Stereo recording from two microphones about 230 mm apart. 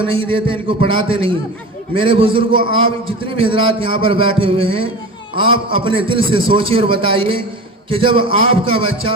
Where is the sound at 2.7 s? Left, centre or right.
Left.